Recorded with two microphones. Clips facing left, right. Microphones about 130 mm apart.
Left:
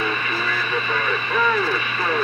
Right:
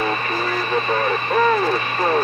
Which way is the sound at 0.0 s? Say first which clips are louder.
Right 3 dB; 40° right (ahead or behind).